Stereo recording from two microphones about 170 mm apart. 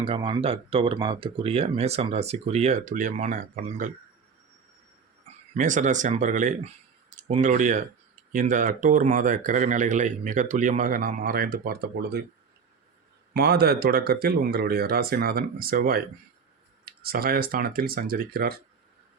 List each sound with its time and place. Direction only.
0.0 s speech: 30° right (ahead or behind); by 3.9 s 50° right (ahead or behind)
5.5 s speech: 50° right (ahead or behind); by 12.2 s 65° right (ahead or behind)
13.3 s speech: 70° right (ahead or behind)